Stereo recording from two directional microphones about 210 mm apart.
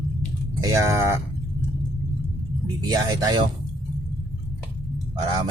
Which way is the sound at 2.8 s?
20° right (ahead or behind).